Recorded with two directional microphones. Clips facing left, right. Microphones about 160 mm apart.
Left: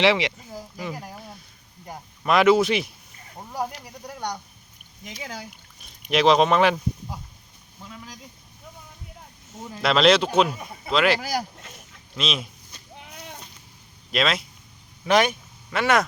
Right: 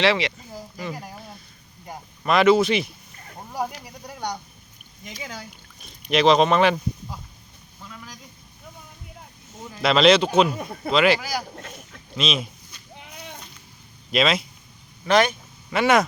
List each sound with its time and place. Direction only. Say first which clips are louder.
0.0 s speech: left 1 dB; 15° left (ahead or behind)
0.8 s speech: right 1 dB; 5° left (ahead or behind)
7.9 s speech: even; 25° left (ahead or behind)
9.8 s speech: right 2 dB; centre (ahead or behind)
11.5 s a sound: right 6 dB; 60° right (ahead or behind)
12.1 s speech: right 3 dB; centre (ahead or behind)
14.1 s speech: right 3 dB; centre (ahead or behind)
15.0 s speech: right 1 dB; 15° left (ahead or behind)
15.3 s speech: right 2 dB; centre (ahead or behind)